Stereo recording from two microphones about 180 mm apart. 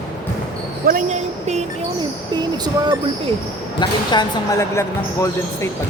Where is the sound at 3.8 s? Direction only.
20° left (ahead or behind).